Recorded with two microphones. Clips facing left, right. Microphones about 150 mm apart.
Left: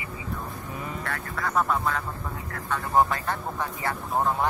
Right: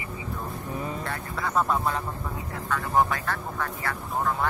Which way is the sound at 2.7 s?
10° left (ahead or behind).